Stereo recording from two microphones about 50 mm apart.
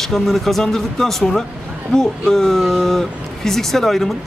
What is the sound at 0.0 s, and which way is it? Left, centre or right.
Speech, centre.